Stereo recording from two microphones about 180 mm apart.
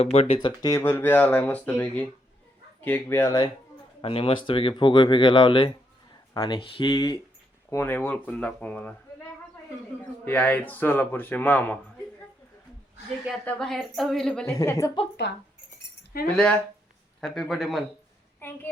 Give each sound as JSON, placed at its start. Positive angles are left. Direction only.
{"t": 0.0, "sound": "speech", "side_deg": 35}
{"t": 0.6, "sound": "a man's voice", "side_deg": 15}
{"t": 7.7, "sound": "a man's voice", "side_deg": 10}
{"t": 10.2, "sound": "a man's voice", "side_deg": 10}
{"t": 13.2, "sound": "a woman's voice", "side_deg": 5}
{"t": 14.6, "sound": "a man's voice", "side_deg": 15}
{"t": 15.3, "sound": "speech", "side_deg": 70}
{"t": 16.2, "sound": "a woman's voice", "side_deg": 5}
{"t": 18.3, "sound": "a child's voice", "side_deg": 10}